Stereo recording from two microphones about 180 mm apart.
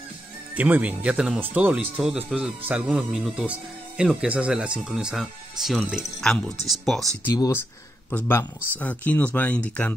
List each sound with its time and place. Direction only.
0.6 s speech: 10° right (ahead or behind)
7.3 s speech: 20° left (ahead or behind)
8.7 s speech: 10° left (ahead or behind)